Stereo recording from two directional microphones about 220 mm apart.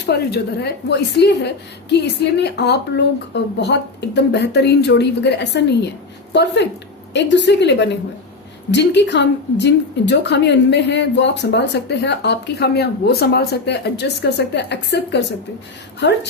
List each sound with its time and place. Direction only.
0.0 s a woman's voice: 50° left (ahead or behind)